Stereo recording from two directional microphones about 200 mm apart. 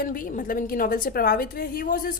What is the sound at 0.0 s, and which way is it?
A woman's voice, 45° left (ahead or behind).